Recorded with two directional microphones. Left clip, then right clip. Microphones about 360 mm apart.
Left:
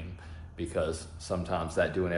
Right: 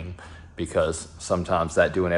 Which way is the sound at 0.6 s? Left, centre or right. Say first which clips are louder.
Right 8 dB; right.